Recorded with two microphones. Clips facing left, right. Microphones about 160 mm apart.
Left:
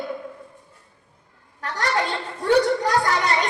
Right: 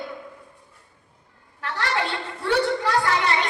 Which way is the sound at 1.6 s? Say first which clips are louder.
Left 2 dB; 40° left (ahead or behind).